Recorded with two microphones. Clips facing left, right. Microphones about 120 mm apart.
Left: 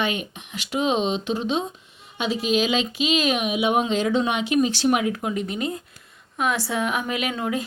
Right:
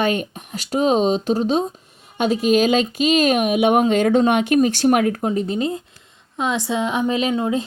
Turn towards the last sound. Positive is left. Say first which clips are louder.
# right 6 dB
turn(degrees=-25)  # may be behind; listen again after turning